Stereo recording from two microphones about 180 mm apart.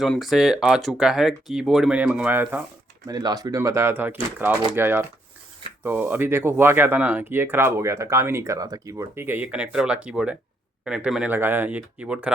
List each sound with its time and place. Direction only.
0.0 s speech: centre (ahead or behind)
3.1 s speech: 20° right (ahead or behind)